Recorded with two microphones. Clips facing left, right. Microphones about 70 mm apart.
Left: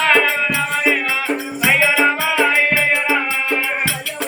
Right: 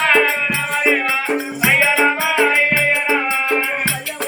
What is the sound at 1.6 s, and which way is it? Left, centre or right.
Music, centre.